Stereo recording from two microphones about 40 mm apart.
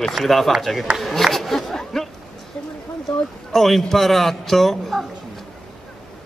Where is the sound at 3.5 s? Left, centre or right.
Centre.